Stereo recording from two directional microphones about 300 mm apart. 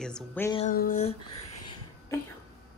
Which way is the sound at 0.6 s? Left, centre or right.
Left.